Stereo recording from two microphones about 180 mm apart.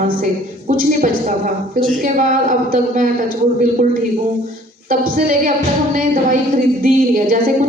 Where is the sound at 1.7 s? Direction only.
50° right (ahead or behind).